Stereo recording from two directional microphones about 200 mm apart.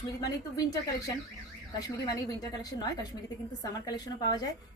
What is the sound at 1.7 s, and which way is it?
A woman's voice, 20° left (ahead or behind).